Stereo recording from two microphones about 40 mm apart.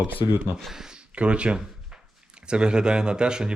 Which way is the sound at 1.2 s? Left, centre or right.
Right.